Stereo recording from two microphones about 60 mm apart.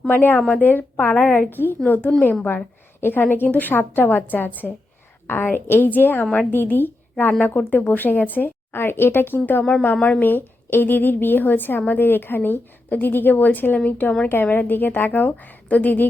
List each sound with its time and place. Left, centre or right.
0.1 s a woman's voice: left
9.8 s a woman's voice: left